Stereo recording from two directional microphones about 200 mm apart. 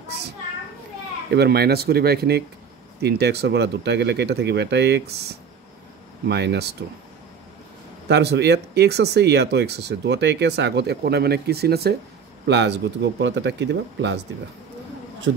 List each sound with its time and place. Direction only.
1.3 s speech: 55° right (ahead or behind)
6.2 s speech: 55° right (ahead or behind)
8.1 s speech: 55° right (ahead or behind)
15.3 s a man's voice: 65° right (ahead or behind)